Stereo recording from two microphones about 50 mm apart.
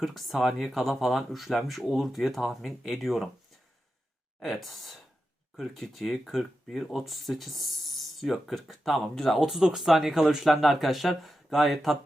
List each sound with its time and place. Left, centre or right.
0.0 s speech: centre
4.4 s speech: centre
9.4 s speech: centre